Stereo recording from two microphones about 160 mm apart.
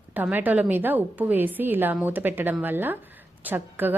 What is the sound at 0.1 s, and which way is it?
A woman's voice, 10° right (ahead or behind).